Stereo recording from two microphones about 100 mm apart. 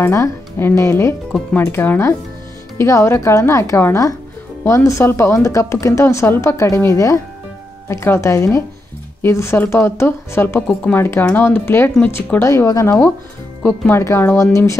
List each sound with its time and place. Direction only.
0.0 s a woman's voice: 25° left (ahead or behind)